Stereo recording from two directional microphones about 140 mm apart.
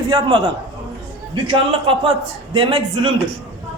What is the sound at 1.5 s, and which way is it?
A man's voice, 35° right (ahead or behind).